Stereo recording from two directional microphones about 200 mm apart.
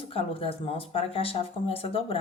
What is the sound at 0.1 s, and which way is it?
Speech, 30° left (ahead or behind).